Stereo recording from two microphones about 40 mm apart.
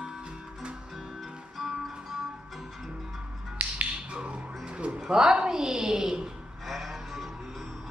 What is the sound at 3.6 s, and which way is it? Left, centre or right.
Music, right.